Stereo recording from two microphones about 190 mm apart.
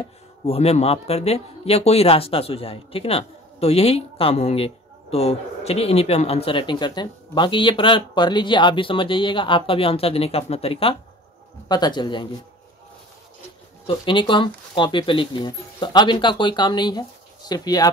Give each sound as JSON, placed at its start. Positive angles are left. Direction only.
{"t": 0.5, "sound": "speech", "side_deg": 35}
{"t": 13.8, "sound": "speech", "side_deg": 25}